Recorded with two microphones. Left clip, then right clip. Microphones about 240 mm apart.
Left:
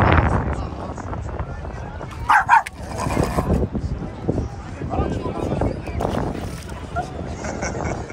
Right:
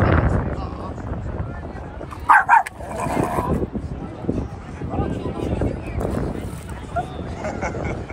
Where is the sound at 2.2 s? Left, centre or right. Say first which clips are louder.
Right 1 dB; centre.